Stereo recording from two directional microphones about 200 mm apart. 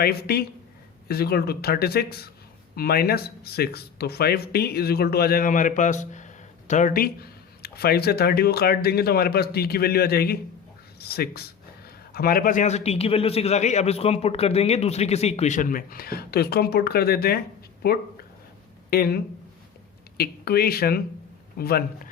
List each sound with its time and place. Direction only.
0.0 s a man's voice: 50° left (ahead or behind)